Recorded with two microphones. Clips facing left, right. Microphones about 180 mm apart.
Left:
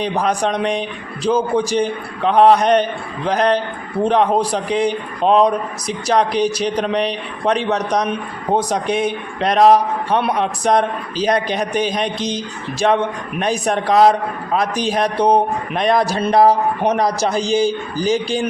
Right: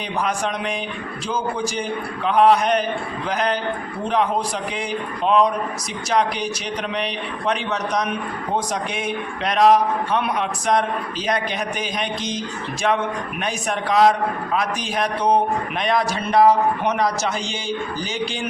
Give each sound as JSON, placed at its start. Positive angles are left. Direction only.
{"t": 0.0, "sound": "a man's voice", "side_deg": 35}